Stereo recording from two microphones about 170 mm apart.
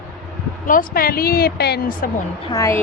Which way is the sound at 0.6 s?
55° left (ahead or behind).